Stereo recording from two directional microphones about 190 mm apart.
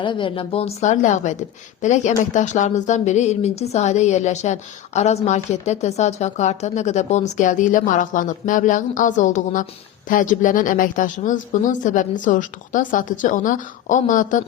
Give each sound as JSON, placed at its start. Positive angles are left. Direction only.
{"t": 0.0, "sound": "a woman's voice", "side_deg": 25}